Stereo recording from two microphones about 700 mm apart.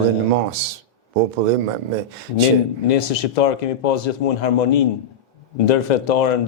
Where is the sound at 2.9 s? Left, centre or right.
Left.